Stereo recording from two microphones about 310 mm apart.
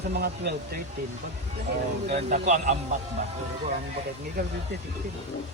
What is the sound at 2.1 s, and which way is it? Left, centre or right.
Speech, right.